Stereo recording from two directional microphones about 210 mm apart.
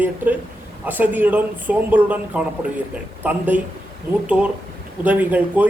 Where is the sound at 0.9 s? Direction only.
10° right (ahead or behind).